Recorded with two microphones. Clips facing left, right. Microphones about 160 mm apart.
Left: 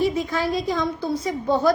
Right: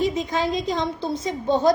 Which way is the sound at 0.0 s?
20° right (ahead or behind).